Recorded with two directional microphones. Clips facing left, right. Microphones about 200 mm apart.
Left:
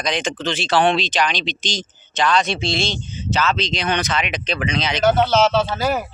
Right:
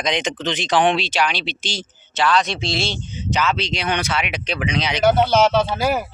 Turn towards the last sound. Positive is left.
turn(degrees=-10)  # may be behind; listen again after turning